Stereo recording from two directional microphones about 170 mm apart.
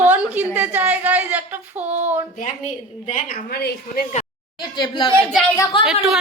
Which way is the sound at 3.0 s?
35° left (ahead or behind).